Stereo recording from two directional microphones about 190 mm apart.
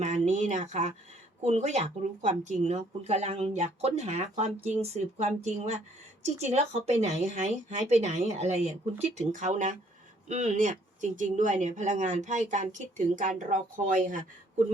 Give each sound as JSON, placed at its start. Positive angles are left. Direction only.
{"t": 0.0, "sound": "speech", "side_deg": -40}